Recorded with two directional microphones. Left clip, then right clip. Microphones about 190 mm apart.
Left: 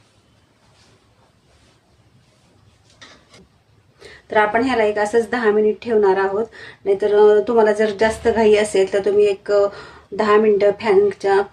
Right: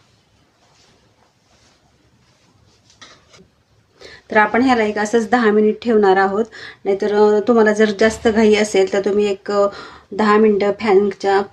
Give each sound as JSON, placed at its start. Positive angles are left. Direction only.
{"t": 4.0, "sound": "speech", "side_deg": -40}